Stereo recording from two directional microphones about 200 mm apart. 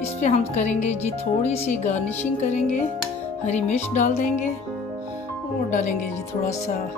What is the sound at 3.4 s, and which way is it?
Speech, 35° left (ahead or behind).